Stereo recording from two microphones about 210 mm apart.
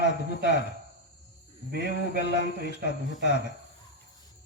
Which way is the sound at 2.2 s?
55° left (ahead or behind).